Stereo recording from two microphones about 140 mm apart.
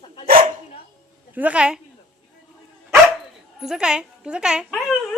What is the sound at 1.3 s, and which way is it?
Speech, 10° right (ahead or behind).